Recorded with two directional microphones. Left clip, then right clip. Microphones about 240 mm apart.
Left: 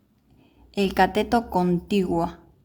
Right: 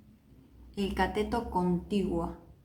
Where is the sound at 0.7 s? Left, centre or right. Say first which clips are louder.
Left 10 dB; left.